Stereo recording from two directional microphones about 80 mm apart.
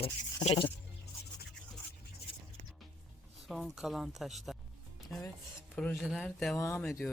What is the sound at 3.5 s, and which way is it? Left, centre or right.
Speech, centre.